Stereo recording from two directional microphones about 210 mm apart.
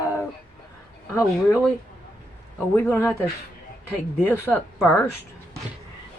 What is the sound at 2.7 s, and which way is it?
Speech, 10° left (ahead or behind).